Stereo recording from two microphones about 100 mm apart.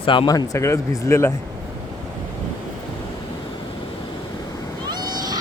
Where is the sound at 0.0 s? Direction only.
60° left (ahead or behind).